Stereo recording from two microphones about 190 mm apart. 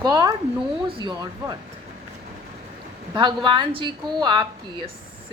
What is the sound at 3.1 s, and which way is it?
Speech, 25° right (ahead or behind).